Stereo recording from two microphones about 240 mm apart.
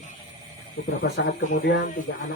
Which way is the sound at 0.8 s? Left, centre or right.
Left.